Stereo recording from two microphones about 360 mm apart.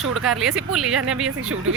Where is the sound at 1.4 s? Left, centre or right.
Right.